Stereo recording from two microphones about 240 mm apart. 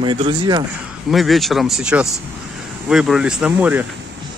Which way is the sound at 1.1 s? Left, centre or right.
Centre.